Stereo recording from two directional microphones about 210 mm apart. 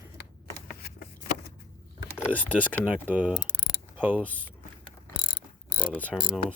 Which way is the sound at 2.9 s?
5° right (ahead or behind).